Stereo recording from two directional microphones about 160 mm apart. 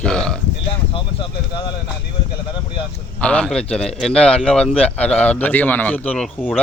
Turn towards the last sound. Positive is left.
turn(degrees=10)  # may be behind; listen again after turning